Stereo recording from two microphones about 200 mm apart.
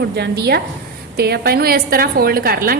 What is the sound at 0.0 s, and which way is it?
A woman's voice, 55° right (ahead or behind).